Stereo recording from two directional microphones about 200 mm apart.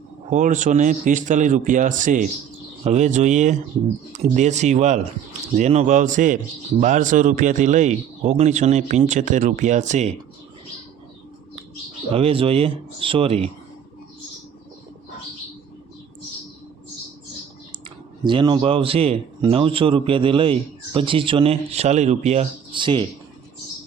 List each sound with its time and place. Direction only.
0.3 s a man's voice: 40° right (ahead or behind)
12.1 s a man's voice: 30° right (ahead or behind)
18.3 s a man's voice: 25° right (ahead or behind)